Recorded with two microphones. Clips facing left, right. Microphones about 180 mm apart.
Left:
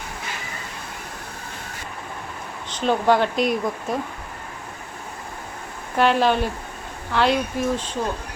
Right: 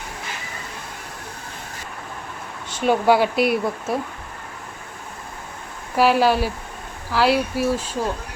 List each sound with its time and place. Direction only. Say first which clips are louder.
2.6 s speech: right 2 dB; 10° right (ahead or behind)
6.0 s speech: right 2 dB; 5° right (ahead or behind)